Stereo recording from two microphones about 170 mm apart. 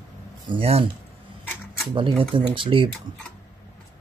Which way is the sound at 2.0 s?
30° right (ahead or behind).